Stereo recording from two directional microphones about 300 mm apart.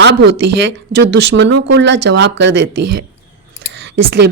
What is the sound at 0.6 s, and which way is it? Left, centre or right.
A woman's voice, right.